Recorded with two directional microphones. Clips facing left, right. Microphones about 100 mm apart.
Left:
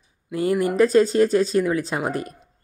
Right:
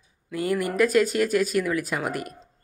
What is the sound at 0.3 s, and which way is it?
Speech, 30° left (ahead or behind).